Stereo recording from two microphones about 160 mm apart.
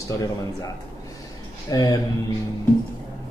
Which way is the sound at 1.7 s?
25° left (ahead or behind).